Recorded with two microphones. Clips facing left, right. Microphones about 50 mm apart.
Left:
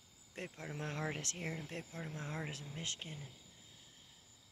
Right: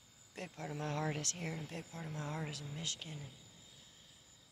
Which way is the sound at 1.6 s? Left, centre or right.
Left.